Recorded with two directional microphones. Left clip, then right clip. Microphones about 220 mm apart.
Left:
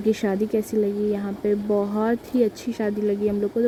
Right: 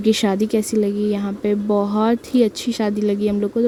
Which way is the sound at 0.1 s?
60° right (ahead or behind).